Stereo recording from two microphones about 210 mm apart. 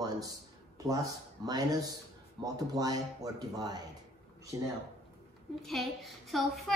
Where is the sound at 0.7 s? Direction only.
15° right (ahead or behind).